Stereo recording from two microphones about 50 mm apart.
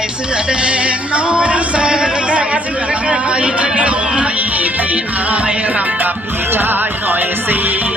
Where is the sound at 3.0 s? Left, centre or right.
Right.